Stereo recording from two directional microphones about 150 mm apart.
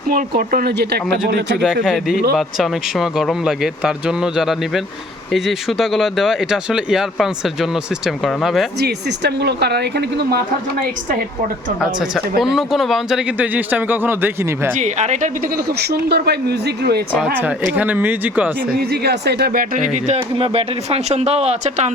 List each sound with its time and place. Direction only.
0.1 s speech: 65° right (ahead or behind); by 1.6 s 90° right
1.6 s speech: 5° right (ahead or behind)
9.4 s speech: 90° right
12.4 s speech: centre (ahead or behind)
14.8 s speech: 50° right (ahead or behind)
15.5 s speech: 90° right
17.3 s speech: 10° right (ahead or behind)
18.9 s speech: 90° right
19.9 s speech: 45° right (ahead or behind)